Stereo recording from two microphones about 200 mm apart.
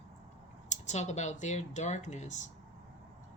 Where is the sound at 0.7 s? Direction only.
35° left (ahead or behind).